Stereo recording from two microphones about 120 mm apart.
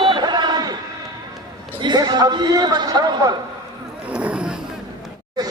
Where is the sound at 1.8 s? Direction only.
35° right (ahead or behind).